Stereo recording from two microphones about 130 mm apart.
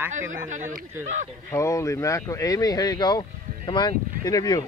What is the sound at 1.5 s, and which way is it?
Speech, 25° left (ahead or behind).